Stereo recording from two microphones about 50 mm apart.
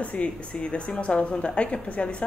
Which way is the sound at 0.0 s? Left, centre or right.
Left.